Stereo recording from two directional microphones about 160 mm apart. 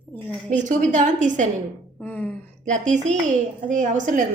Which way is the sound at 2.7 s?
50° right (ahead or behind).